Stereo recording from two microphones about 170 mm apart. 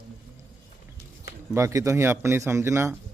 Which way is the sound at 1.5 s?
20° right (ahead or behind).